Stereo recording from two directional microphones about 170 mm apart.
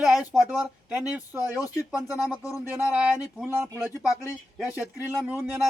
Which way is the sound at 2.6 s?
10° right (ahead or behind).